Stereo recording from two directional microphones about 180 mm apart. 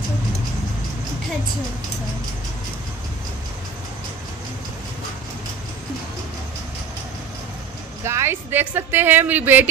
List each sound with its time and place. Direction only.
8.0 s a woman's voice: 15° right (ahead or behind)